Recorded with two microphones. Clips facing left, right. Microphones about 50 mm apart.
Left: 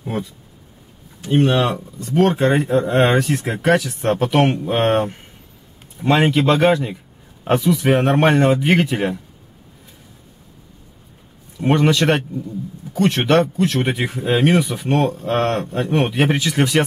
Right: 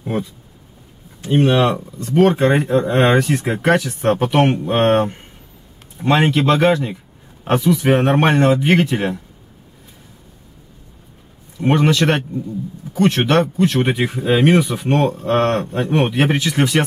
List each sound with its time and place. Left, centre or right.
1.5 s speech: centre
3.3 s speech: centre
3.5 s speech: centre
11.6 s speech: centre